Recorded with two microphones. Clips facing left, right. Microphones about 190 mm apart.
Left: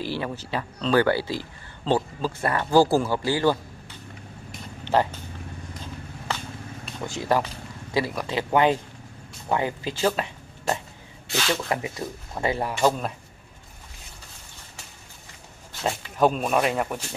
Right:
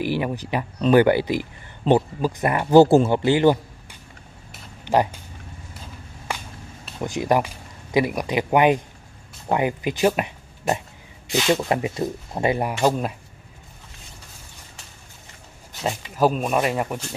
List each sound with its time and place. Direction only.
0.0 s speech: 15° right (ahead or behind)
4.5 s a sound: 5° right (ahead or behind)
6.3 s vehicle: 10° right (ahead or behind)
7.0 s speech: 15° right (ahead or behind)
16.2 s speech: 5° right (ahead or behind)